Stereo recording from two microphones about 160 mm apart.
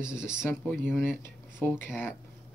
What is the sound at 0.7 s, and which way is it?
Speech, 10° left (ahead or behind).